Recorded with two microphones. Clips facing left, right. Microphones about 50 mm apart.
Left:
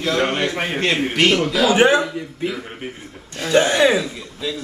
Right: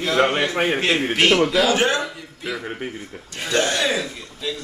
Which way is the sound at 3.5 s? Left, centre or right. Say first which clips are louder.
Left 6 dB; centre.